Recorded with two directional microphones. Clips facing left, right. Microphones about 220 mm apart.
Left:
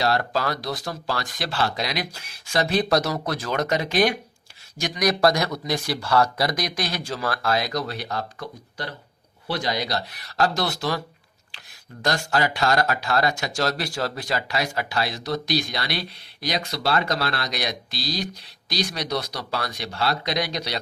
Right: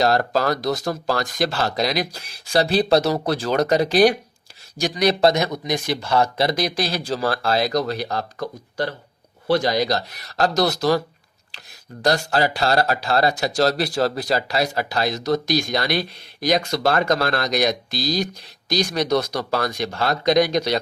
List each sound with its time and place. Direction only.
0.0 s speech: 40° right (ahead or behind)